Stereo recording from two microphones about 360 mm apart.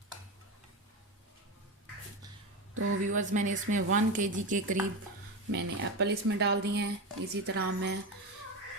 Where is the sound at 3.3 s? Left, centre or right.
Right.